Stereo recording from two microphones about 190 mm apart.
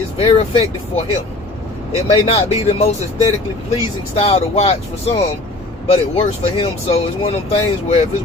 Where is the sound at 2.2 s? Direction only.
35° left (ahead or behind).